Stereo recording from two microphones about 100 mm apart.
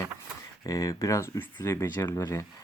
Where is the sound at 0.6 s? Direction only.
35° left (ahead or behind).